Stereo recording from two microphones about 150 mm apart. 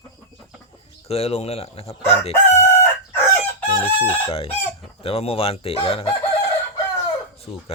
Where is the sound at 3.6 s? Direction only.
40° left (ahead or behind).